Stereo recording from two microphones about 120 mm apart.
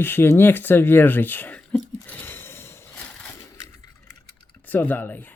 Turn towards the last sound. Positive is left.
turn(degrees=15)  # may be behind; listen again after turning